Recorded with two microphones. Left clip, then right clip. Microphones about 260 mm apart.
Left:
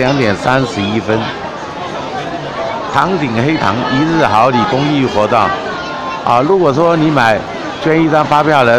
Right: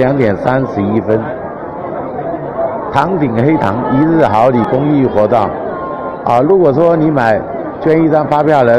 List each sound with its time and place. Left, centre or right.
0.0 s speech: centre
3.0 s speech: centre